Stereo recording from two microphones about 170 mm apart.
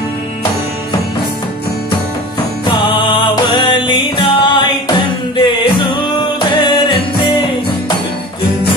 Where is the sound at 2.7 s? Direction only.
30° left (ahead or behind).